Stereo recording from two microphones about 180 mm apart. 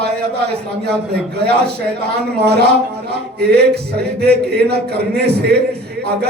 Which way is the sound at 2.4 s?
65° right (ahead or behind).